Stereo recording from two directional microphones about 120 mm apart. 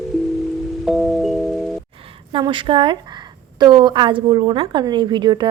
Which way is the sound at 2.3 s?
45° right (ahead or behind).